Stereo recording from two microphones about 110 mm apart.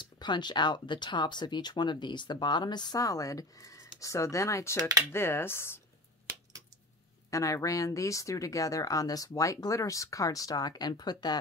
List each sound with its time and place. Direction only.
0.0 s speech: 45° left (ahead or behind)
4.7 s speech: 35° right (ahead or behind)
5.1 s speech: 20° left (ahead or behind)
7.2 s speech: 30° left (ahead or behind)